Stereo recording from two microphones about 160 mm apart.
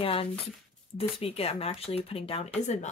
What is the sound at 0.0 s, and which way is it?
Speech, 35° left (ahead or behind).